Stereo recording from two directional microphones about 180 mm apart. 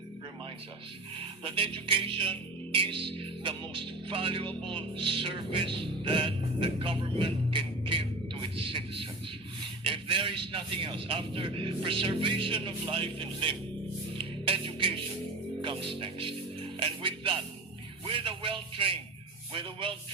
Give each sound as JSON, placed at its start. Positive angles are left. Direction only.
{"t": 1.2, "sound": "music", "side_deg": -30}
{"t": 9.8, "sound": "a man's voice", "side_deg": -30}
{"t": 14.2, "sound": "music", "side_deg": -30}
{"t": 18.1, "sound": "a sound", "side_deg": -30}
{"t": 19.5, "sound": "music", "side_deg": -30}